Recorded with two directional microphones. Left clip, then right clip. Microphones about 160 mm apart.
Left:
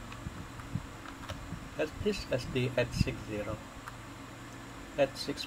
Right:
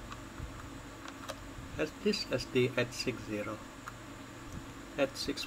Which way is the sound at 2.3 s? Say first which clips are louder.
Even; 30° right (ahead or behind).